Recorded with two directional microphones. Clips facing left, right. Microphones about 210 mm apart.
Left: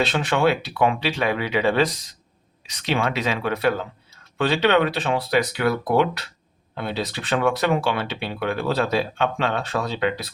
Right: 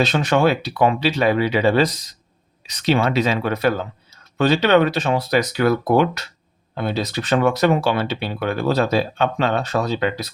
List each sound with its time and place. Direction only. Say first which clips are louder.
0.0 s speech: right 3 dB; 40° right (ahead or behind)